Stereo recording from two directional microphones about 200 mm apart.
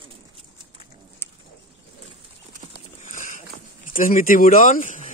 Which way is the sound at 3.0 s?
40° left (ahead or behind).